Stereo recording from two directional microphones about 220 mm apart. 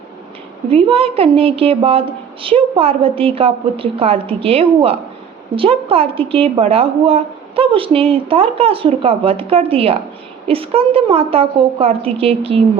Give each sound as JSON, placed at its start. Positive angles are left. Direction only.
{"t": 0.7, "sound": "a woman's voice", "side_deg": -25}